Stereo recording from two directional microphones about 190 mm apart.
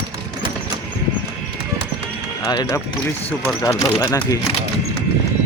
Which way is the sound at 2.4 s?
15° left (ahead or behind).